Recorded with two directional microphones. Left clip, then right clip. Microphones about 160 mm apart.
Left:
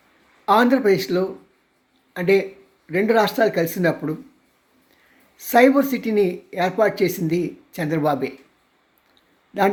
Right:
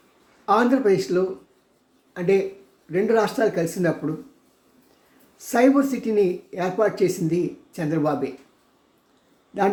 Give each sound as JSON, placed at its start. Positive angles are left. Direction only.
{"t": 0.4, "sound": "speech", "side_deg": 20}
{"t": 5.4, "sound": "speech", "side_deg": 15}